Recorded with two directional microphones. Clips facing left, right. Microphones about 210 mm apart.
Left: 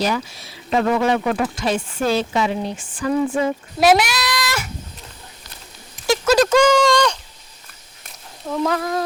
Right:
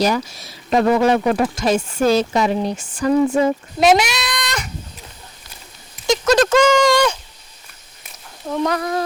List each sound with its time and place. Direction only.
0.0 s speech: 40° right (ahead or behind)
3.8 s speech: 5° left (ahead or behind)
6.2 s speech: 5° left (ahead or behind)
6.9 s a sound: 5° right (ahead or behind)
8.4 s speech: centre (ahead or behind)